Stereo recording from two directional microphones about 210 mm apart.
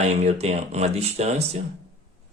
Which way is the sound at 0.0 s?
30° right (ahead or behind).